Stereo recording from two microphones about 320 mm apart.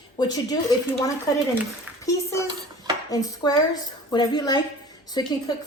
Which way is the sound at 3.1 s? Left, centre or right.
Centre.